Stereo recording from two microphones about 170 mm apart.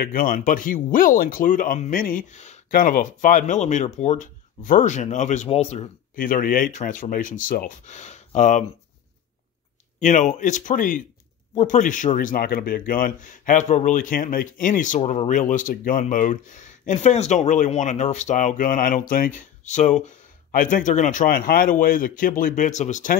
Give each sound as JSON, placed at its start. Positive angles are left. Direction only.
{"t": 0.0, "sound": "speech", "side_deg": 55}
{"t": 2.7, "sound": "speech", "side_deg": 55}
{"t": 6.1, "sound": "speech", "side_deg": 55}
{"t": 9.9, "sound": "speech", "side_deg": 45}